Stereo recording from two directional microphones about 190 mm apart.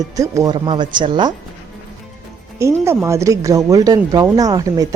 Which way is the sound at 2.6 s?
15° right (ahead or behind).